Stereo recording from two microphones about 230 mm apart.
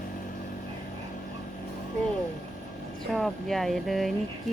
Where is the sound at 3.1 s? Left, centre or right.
Centre.